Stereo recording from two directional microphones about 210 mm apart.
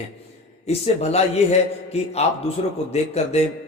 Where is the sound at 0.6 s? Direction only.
30° left (ahead or behind).